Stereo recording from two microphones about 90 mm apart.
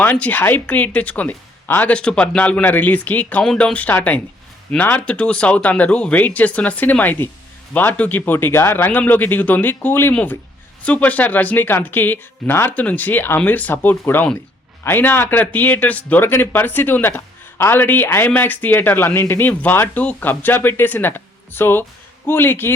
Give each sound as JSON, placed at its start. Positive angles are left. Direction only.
{"t": 0.0, "sound": "speech", "side_deg": 20}